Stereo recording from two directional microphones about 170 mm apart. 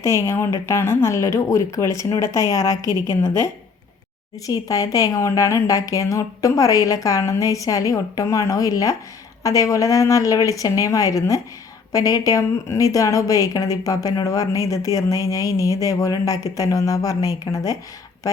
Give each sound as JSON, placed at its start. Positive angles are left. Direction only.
{"t": 0.0, "sound": "speech", "side_deg": 15}
{"t": 2.8, "sound": "a woman's voice", "side_deg": -20}
{"t": 4.4, "sound": "a woman's voice", "side_deg": 20}